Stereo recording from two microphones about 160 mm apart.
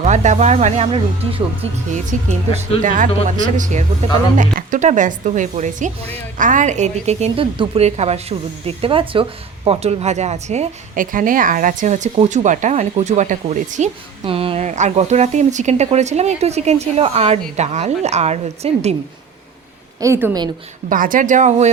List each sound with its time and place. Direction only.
0.0 s speech: 45° right (ahead or behind)
2.8 s speech: 55° right (ahead or behind)
14.3 s speech: 35° right (ahead or behind)
20.0 s a woman's voice: 15° right (ahead or behind)
20.9 s speech: 55° right (ahead or behind)